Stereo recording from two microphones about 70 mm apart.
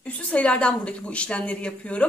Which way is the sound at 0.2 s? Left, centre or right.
Centre.